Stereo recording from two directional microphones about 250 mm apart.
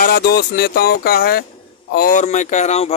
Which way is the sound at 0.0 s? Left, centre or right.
Left.